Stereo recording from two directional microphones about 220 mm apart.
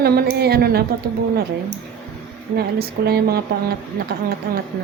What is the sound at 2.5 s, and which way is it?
A woman's voice, 45° right (ahead or behind).